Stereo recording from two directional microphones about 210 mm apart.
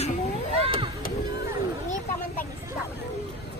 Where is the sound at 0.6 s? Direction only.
25° right (ahead or behind).